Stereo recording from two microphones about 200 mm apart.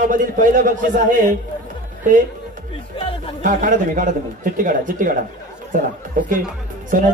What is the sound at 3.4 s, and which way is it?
Speech, 40° right (ahead or behind).